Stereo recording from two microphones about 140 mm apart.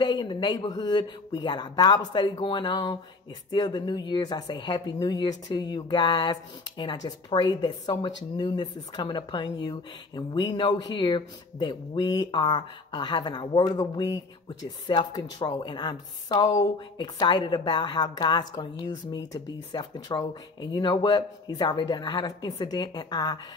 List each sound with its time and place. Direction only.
0.0 s a woman's voice: 30° left (ahead or behind)